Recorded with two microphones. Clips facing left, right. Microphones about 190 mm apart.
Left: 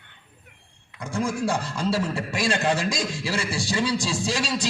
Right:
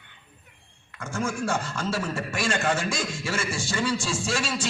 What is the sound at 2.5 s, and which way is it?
A man's voice, 35° left (ahead or behind).